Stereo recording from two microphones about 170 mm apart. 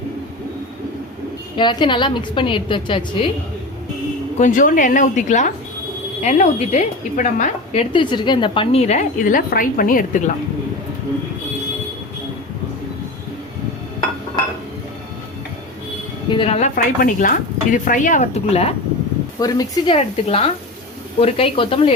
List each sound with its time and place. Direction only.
1.5 s a woman's voice: 30° left (ahead or behind)
4.4 s speech: 50° left (ahead or behind)
7.7 s a woman's voice: 35° left (ahead or behind)
9.5 s speech: 55° left (ahead or behind)
16.3 s speech: 35° left (ahead or behind)
19.4 s a woman's voice: 20° left (ahead or behind)
20.0 s a woman's voice: 35° left (ahead or behind)